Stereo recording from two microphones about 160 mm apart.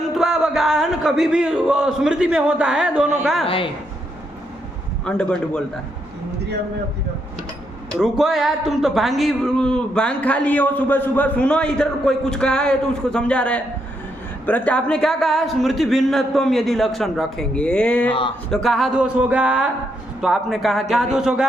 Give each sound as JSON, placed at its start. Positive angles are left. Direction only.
{"t": 0.1, "sound": "speech", "side_deg": 0}
{"t": 3.4, "sound": "speech", "side_deg": 35}
{"t": 5.0, "sound": "speech", "side_deg": 5}
{"t": 7.9, "sound": "speech", "side_deg": -5}